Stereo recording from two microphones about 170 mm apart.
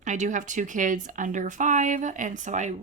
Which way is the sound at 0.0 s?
45° right (ahead or behind).